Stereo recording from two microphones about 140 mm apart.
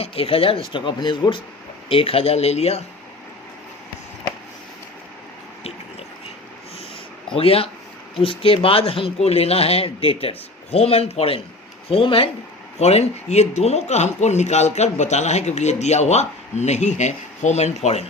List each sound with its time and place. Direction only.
0.0 s speech: 45° left (ahead or behind)
7.3 s speech: 45° left (ahead or behind)